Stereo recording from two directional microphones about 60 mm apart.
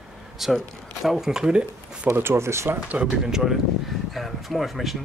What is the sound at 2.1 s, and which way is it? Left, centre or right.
Speech, right.